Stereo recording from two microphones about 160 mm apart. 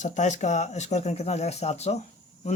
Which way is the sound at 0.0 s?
50° left (ahead or behind).